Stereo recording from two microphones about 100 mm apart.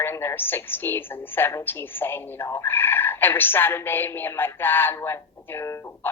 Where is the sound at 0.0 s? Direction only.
25° left (ahead or behind).